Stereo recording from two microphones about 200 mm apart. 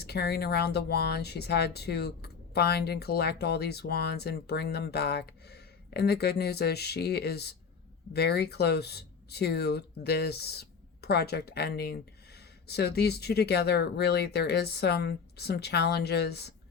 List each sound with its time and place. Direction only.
0.0 s speech: 55° left (ahead or behind)